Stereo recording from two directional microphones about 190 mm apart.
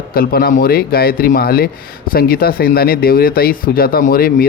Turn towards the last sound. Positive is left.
turn(degrees=50)  # may be behind; listen again after turning